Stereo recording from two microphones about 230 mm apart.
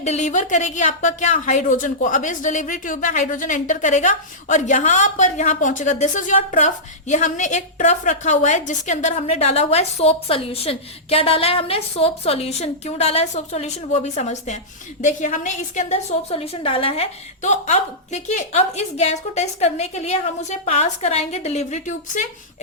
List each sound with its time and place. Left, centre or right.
0.0 s a woman's voice: left